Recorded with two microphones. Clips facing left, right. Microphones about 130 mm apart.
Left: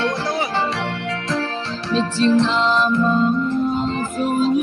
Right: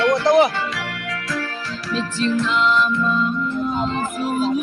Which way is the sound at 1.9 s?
30° left (ahead or behind).